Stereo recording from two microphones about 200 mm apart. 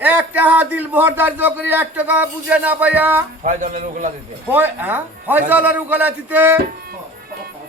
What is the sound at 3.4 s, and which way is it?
Speech, 40° right (ahead or behind).